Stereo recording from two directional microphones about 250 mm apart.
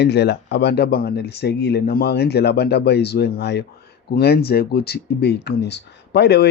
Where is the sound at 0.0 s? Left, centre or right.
Left.